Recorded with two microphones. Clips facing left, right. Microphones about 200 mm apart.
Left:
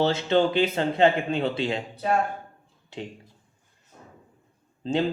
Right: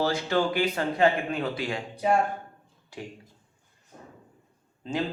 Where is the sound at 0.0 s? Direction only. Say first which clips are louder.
Left 4 dB; 25° left (ahead or behind).